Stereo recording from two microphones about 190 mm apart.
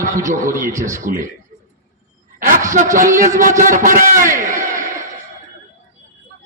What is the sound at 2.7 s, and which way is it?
A man's voice, 45° right (ahead or behind).